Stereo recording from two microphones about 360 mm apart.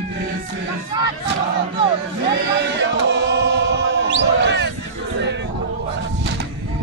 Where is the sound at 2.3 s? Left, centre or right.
Right.